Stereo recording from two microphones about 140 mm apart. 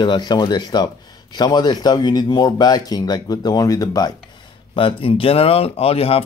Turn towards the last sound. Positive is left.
turn(degrees=45)  # may be behind; listen again after turning